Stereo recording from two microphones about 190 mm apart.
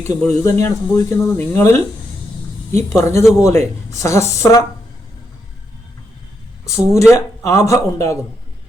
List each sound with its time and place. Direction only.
0.0 s speech: 15° left (ahead or behind)
6.7 s speech: 15° left (ahead or behind)